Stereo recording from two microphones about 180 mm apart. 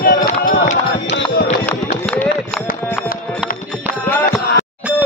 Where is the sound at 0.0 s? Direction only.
55° left (ahead or behind).